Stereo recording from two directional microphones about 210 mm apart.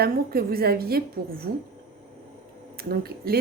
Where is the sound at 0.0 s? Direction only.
45° right (ahead or behind).